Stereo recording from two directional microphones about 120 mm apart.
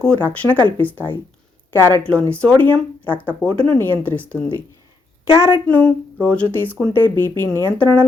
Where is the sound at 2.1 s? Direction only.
10° left (ahead or behind).